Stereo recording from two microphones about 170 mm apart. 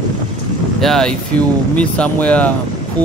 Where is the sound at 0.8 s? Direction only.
Centre (ahead or behind).